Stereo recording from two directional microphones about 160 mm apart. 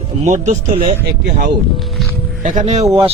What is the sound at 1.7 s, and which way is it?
Speech, centre (ahead or behind).